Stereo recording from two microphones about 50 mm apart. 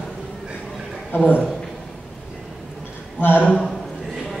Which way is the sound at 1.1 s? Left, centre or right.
Left.